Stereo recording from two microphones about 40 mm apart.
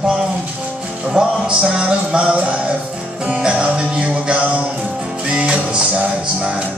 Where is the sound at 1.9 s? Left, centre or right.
Right.